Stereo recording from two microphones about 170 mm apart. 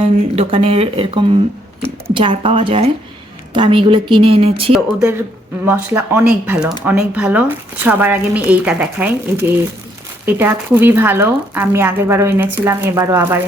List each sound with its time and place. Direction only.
0.0 s speech: 35° right (ahead or behind)
5.6 s speech: 15° right (ahead or behind)